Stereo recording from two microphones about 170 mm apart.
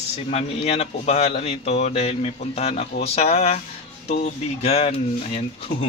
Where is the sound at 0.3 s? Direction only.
40° left (ahead or behind).